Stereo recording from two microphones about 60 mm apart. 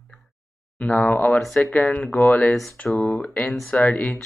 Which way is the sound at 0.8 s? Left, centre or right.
Left.